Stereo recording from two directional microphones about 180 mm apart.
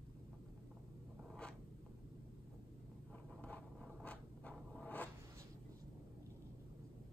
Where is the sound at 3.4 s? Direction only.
5° left (ahead or behind).